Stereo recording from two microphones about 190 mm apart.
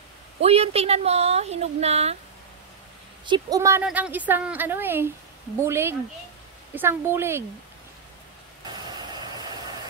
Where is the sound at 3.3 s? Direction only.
20° right (ahead or behind).